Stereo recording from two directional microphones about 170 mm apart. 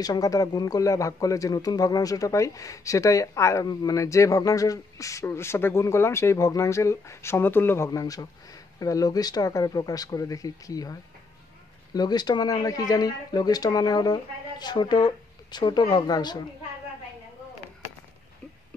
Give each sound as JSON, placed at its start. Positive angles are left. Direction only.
{"t": 0.0, "sound": "speech", "side_deg": 20}